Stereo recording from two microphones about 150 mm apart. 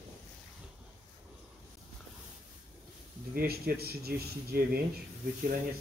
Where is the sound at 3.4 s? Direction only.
85° right.